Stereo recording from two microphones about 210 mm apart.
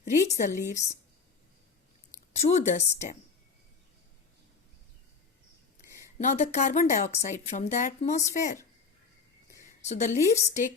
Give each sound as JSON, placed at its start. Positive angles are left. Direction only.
{"t": 0.0, "sound": "a woman's voice", "side_deg": 35}
{"t": 2.3, "sound": "a woman's voice", "side_deg": 30}
{"t": 6.1, "sound": "a woman's voice", "side_deg": 35}
{"t": 9.8, "sound": "a woman's voice", "side_deg": 35}